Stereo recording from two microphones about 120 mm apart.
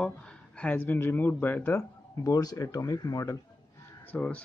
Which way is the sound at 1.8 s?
30° left (ahead or behind).